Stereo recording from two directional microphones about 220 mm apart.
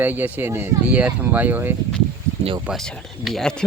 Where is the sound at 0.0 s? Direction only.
10° right (ahead or behind).